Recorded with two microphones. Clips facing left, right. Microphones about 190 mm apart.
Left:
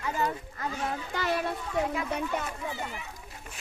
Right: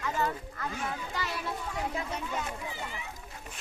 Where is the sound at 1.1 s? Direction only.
50° left (ahead or behind).